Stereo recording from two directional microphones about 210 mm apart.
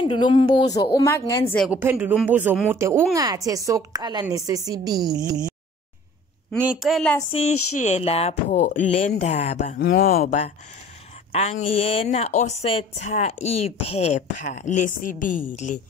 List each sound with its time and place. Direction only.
0.0 s a woman's voice: 25° left (ahead or behind)
1.6 s a woman's voice: 10° right (ahead or behind)
6.6 s a woman's voice: 5° right (ahead or behind)
7.2 s a woman's voice: 25° left (ahead or behind)
7.5 s speech: 90° left
7.8 s speech: 30° left (ahead or behind)
9.8 s speech: 50° left (ahead or behind)
11.6 s speech: 30° left (ahead or behind)